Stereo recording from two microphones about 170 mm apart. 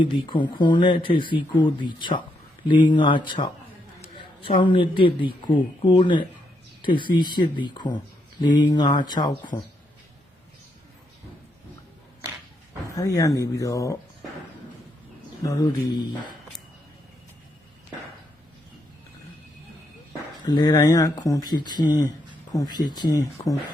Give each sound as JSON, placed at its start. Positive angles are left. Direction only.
{"t": 0.0, "sound": "speech", "side_deg": 30}
{"t": 13.0, "sound": "speech", "side_deg": 20}
{"t": 15.4, "sound": "speech", "side_deg": 20}
{"t": 20.4, "sound": "speech", "side_deg": 25}